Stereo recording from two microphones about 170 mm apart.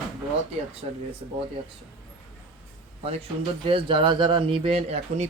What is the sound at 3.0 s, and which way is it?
Speech, 35° right (ahead or behind).